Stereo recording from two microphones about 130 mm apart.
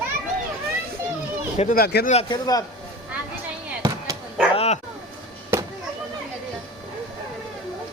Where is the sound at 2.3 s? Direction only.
30° left (ahead or behind).